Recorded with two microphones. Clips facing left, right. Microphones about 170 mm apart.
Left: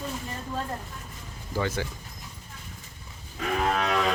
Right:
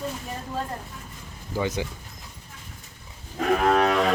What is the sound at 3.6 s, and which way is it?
Cattle, 50° right (ahead or behind).